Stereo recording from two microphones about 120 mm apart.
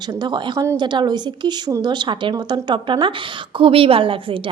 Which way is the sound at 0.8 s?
40° right (ahead or behind).